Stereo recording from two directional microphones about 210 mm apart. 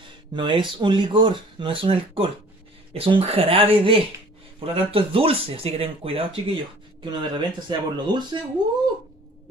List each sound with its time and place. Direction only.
0.3 s speech: 20° right (ahead or behind)